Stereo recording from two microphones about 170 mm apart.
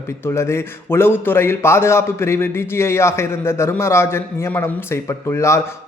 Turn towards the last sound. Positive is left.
turn(degrees=15)  # may be behind; listen again after turning